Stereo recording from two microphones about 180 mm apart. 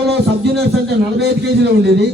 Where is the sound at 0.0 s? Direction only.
70° right (ahead or behind).